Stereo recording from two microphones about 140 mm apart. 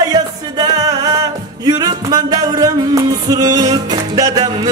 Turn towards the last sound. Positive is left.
turn(degrees=-30)  # may be behind; listen again after turning